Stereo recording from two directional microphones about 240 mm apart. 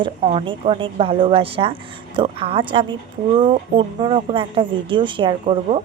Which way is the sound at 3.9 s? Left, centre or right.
Right.